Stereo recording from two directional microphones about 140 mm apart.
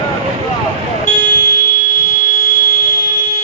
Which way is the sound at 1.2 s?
65° left (ahead or behind).